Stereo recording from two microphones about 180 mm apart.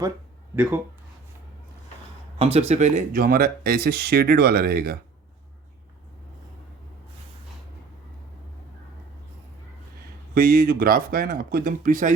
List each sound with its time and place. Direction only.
0.5 s speech: 10° right (ahead or behind)
2.4 s speech: 35° right (ahead or behind); by 4.9 s 55° right (ahead or behind)
10.3 s speech: 55° right (ahead or behind)